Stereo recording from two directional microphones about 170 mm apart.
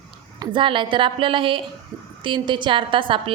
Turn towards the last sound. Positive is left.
turn(degrees=-30)  # may be behind; listen again after turning